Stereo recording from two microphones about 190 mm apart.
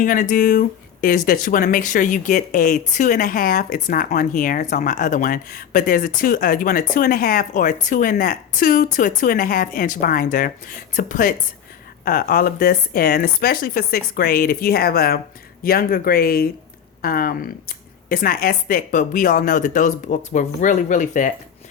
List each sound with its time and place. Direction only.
0.0 s speech: 45° left (ahead or behind)